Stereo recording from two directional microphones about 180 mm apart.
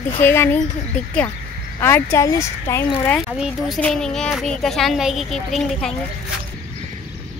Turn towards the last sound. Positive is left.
turn(degrees=0)  # may be behind; listen again after turning